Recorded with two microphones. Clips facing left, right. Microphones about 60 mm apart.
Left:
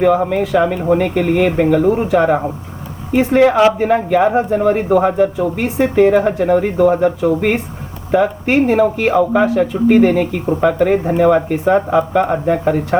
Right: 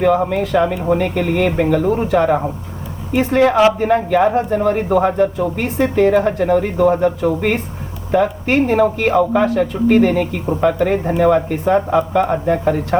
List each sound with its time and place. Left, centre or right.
0.0 s speech: centre
3.5 s speech: centre
4.1 s speech: centre
4.4 s speech: left
4.9 s speech: centre
10.0 s speech: centre
10.4 s speech: centre
12.9 s speech: centre